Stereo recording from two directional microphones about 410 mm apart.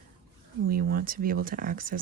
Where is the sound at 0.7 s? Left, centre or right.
Right.